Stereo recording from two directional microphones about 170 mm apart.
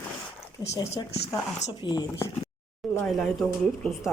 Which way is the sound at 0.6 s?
20° left (ahead or behind).